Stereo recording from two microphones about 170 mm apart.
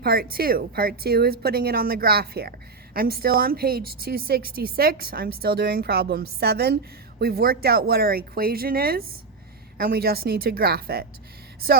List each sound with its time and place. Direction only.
0.0 s a woman's voice: 60° right (ahead or behind)